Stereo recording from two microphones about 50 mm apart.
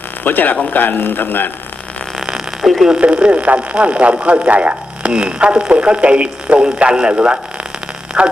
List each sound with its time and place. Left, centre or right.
0.3 s a man's voice: left
2.2 s a sound: centre
2.9 s speech: right